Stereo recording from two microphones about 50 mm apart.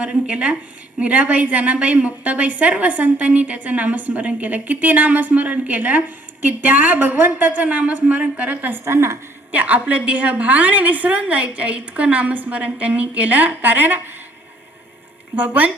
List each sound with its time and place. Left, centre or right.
0.0 s a woman's voice: right
8.8 s a woman's voice: right
9.5 s a woman's voice: right
15.4 s speech: right